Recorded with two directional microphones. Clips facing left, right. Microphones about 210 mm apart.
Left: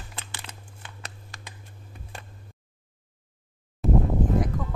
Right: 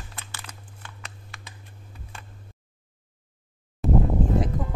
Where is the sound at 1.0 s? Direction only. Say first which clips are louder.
Left 1 dB; 40° left (ahead or behind).